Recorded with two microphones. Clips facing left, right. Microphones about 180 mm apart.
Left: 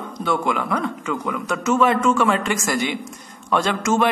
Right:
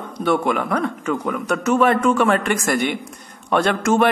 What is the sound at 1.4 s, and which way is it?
A man's voice, 60° right (ahead or behind).